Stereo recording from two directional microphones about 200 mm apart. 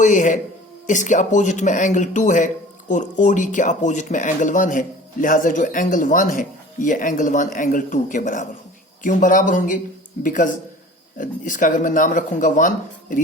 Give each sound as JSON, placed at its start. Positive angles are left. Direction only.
{"t": 0.0, "sound": "speech", "side_deg": 40}